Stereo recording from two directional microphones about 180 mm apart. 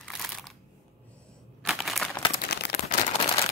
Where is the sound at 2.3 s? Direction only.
65° left (ahead or behind).